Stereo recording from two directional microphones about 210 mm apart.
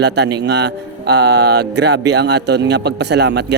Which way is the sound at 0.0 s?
55° right (ahead or behind).